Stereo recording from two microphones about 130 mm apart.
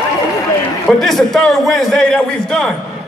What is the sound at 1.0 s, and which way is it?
A man's voice, centre (ahead or behind).